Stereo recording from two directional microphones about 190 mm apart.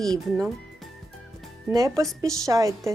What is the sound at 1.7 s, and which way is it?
A woman's voice, 20° right (ahead or behind).